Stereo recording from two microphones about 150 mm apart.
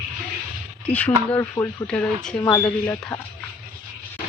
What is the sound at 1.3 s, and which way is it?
Speech, 20° left (ahead or behind).